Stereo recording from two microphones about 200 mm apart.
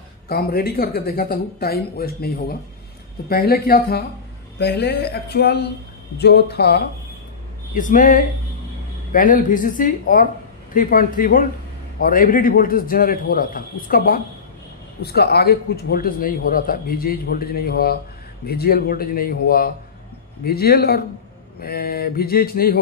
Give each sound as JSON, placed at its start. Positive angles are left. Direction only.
{"t": 0.3, "sound": "a man's voice", "side_deg": 50}
{"t": 7.7, "sound": "a man's voice", "side_deg": 40}